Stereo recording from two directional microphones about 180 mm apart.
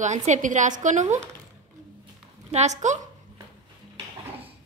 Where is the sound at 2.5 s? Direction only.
40° right (ahead or behind).